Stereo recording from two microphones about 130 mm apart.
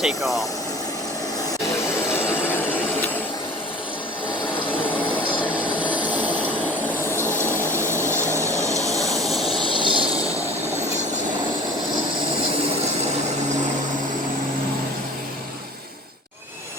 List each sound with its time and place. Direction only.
0.0 s speech: centre (ahead or behind)
2.1 s vehicle: 15° left (ahead or behind)
5.8 s vehicle: 40° left (ahead or behind)
6.1 s vehicle: 10° right (ahead or behind)
7.0 s vehicle: 20° left (ahead or behind)
7.4 s a sound: 20° right (ahead or behind)
9.0 s vehicle: centre (ahead or behind)
9.7 s train: 40° right (ahead or behind)